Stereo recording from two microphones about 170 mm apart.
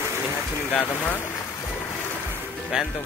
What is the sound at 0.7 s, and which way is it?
Speech, 10° left (ahead or behind).